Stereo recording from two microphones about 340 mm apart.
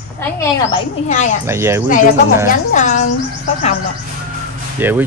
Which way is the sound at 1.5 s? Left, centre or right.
Centre.